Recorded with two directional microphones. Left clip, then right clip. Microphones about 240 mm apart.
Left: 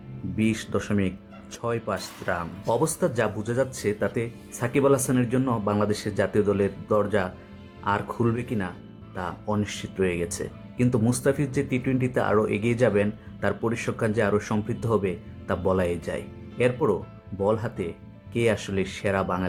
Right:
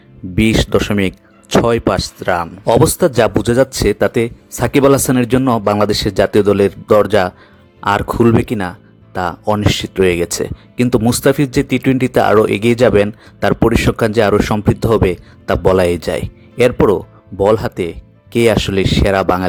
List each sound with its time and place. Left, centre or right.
0.3 s speech: right